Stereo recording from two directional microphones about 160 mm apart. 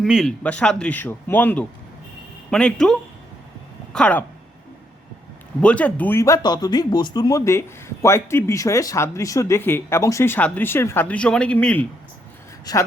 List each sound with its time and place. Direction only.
0.0 s speech: centre (ahead or behind)
5.6 s speech: 10° left (ahead or behind)
12.7 s a man's voice: 25° left (ahead or behind)